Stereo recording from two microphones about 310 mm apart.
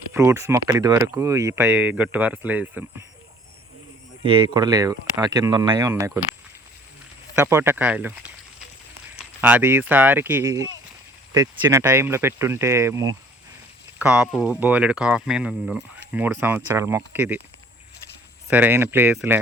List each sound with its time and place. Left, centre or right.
0.1 s speech: centre
4.2 s speech: centre
7.3 s speech: centre
9.4 s speech: centre
18.5 s speech: centre